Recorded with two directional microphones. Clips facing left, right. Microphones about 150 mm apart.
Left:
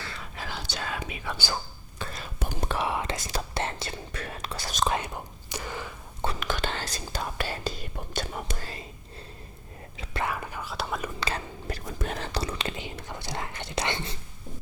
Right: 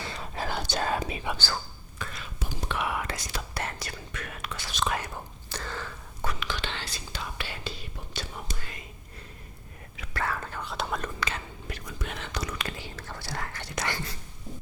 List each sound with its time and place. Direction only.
0.0 s whispering: 20° right (ahead or behind)
0.3 s whispering: 50° right (ahead or behind)
2.0 s whispering: 35° left (ahead or behind)
2.4 s whispering: 50° left (ahead or behind)
2.7 s whispering: 25° left (ahead or behind)
5.0 s whispering: 15° left (ahead or behind)
6.4 s whispering: 45° left (ahead or behind)
8.5 s whispering: 35° left (ahead or behind)
10.0 s whispering: 20° left (ahead or behind)
11.2 s whispering: 35° left (ahead or behind)